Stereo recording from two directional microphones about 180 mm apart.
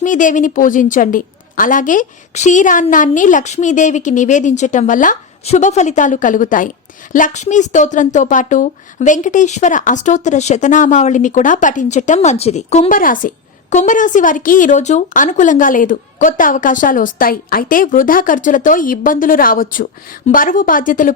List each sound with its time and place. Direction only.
0.0 s a woman's voice: 45° left (ahead or behind)